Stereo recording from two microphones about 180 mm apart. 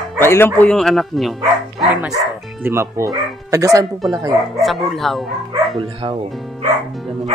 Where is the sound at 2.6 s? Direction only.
15° right (ahead or behind).